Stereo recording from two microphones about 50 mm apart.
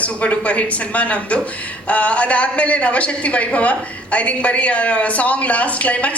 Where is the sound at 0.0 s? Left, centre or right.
Left.